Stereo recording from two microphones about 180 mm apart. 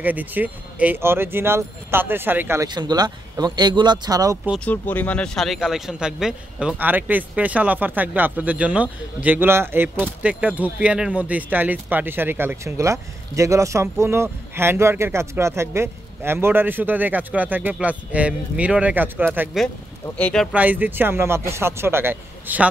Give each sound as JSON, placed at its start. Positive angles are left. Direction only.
{"t": 0.0, "sound": "speech", "side_deg": -10}
{"t": 4.6, "sound": "speech", "side_deg": 10}
{"t": 20.2, "sound": "speech", "side_deg": 5}
{"t": 20.5, "sound": "speech", "side_deg": -10}